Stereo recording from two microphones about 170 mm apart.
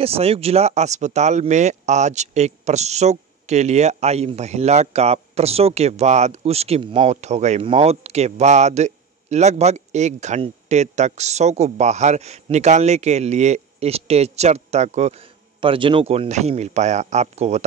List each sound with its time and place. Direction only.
0.0 s speech: 35° right (ahead or behind)